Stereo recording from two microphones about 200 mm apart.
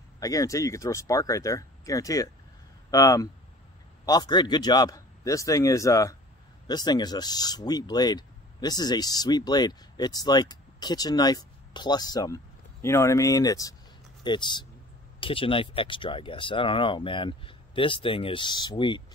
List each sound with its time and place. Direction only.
0.2 s speech: 15° left (ahead or behind)